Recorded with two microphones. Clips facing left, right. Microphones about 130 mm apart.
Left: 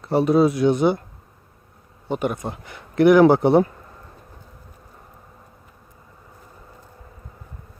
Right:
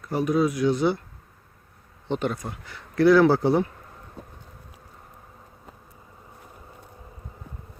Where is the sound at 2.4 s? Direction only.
20° left (ahead or behind).